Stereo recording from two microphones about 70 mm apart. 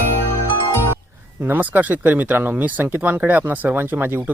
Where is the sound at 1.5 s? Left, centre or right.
Right.